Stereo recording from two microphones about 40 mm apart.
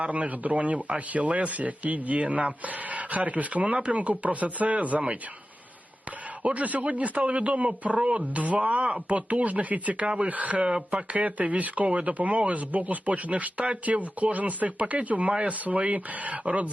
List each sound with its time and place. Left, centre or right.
0.0 s a man's voice: right
6.4 s a man's voice: right
10.6 s speech: right
10.9 s a man's voice: right